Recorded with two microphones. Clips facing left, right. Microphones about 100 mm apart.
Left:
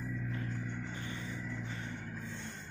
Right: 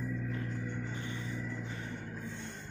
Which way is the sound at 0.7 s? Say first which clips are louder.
Right 2 dB; 20° right (ahead or behind).